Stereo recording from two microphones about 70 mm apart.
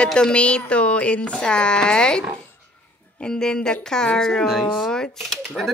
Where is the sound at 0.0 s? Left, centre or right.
Centre.